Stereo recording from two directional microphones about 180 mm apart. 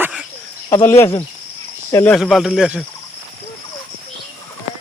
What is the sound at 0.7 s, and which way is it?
Speech, 15° left (ahead or behind).